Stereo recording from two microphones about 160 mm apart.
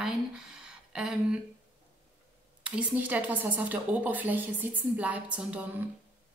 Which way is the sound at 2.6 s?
5° right (ahead or behind).